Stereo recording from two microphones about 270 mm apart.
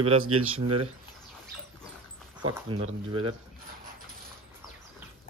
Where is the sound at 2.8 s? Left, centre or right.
Right.